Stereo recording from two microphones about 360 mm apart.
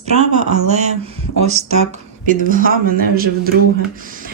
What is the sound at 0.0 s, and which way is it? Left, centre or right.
Speech, centre.